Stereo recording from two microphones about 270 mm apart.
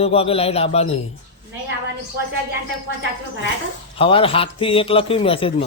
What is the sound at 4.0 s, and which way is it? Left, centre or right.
Speech, centre.